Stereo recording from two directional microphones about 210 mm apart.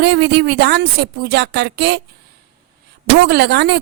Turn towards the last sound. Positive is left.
turn(degrees=-50)  # may be behind; listen again after turning